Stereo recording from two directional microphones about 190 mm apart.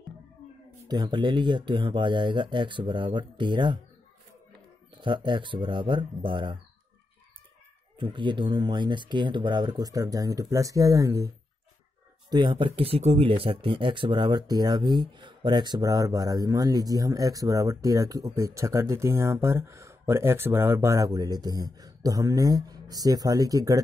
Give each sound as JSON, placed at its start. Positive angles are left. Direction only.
{"t": 0.8, "sound": "speech", "side_deg": -20}
{"t": 5.0, "sound": "speech", "side_deg": -25}
{"t": 8.0, "sound": "speech", "side_deg": -25}